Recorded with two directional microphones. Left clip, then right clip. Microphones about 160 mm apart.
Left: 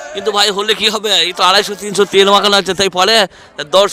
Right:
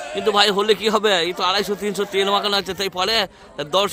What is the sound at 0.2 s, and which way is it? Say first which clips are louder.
Speech: left 3 dB; 45° left (ahead or behind).